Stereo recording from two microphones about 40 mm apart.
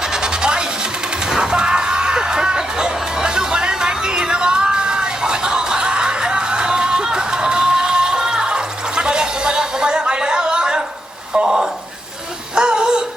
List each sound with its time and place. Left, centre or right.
0.0 s music: centre
11.4 s a sound: centre
12.5 s music: right